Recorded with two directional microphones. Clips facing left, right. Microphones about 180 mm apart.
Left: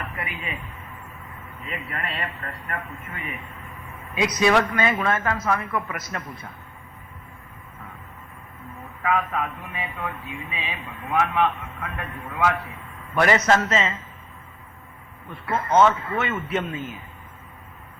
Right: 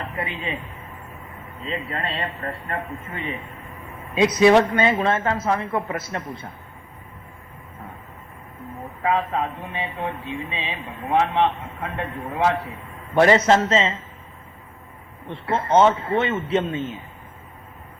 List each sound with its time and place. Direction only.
0.0 s music: 30° right (ahead or behind)
1.6 s speech: 25° right (ahead or behind)
9.0 s speech: 30° right (ahead or behind)
15.3 s speech: 30° right (ahead or behind)